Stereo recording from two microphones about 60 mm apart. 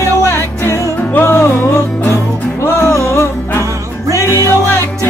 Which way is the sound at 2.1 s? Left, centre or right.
Left.